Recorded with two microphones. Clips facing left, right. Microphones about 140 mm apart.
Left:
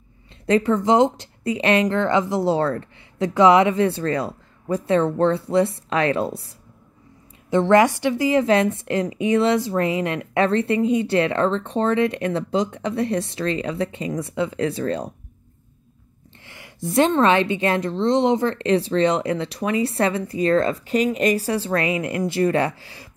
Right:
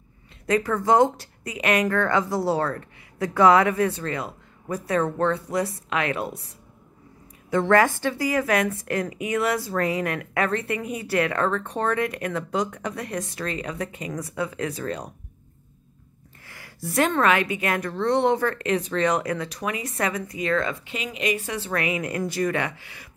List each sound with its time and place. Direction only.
0.5 s a woman's voice: 25° left (ahead or behind)
3.3 s a woman's voice: 20° left (ahead or behind)
7.5 s a woman's voice: 20° left (ahead or behind)
16.4 s a woman's voice: 20° left (ahead or behind)